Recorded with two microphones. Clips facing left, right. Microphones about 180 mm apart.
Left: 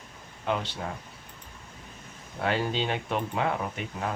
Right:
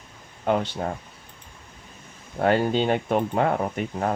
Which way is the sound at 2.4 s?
50° right (ahead or behind).